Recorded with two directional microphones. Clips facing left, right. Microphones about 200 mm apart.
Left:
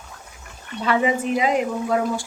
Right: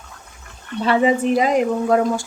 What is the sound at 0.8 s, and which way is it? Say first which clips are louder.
Speech: right 4 dB; 30° right (ahead or behind).